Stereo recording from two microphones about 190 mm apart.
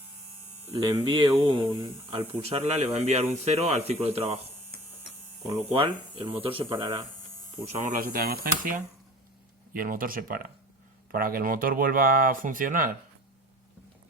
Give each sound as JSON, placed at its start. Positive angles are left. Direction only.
{"t": 0.9, "sound": "speech", "side_deg": -25}
{"t": 5.6, "sound": "speech", "side_deg": -30}
{"t": 7.6, "sound": "speech", "side_deg": -40}